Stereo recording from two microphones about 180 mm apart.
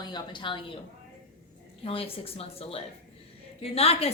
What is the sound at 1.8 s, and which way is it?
A woman's voice, 30° left (ahead or behind).